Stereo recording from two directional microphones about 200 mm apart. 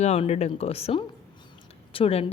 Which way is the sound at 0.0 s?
35° left (ahead or behind).